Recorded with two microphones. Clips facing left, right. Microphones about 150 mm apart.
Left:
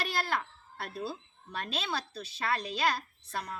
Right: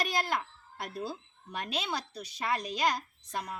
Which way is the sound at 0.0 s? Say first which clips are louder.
Right 1 dB; 15° right (ahead or behind).